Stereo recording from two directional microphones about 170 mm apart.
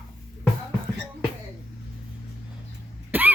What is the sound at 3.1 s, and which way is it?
Throat clearing, 10° right (ahead or behind).